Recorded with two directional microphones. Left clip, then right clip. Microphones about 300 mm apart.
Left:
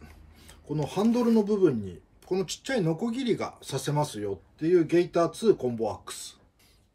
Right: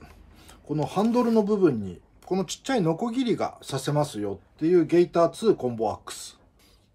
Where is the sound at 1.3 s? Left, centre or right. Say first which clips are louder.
Right 2 dB; centre.